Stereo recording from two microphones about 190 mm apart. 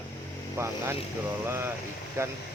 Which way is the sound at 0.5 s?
15° right (ahead or behind).